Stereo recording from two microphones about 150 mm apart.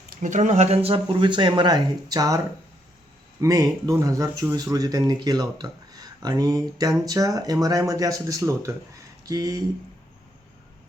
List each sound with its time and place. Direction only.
0.2 s speech: 55° right (ahead or behind); by 2.4 s 25° right (ahead or behind)
3.4 s speech: 20° right (ahead or behind)